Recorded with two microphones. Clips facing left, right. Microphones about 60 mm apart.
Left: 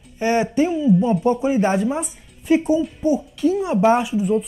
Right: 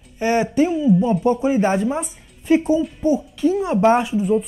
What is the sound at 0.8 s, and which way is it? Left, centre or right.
Speech, centre.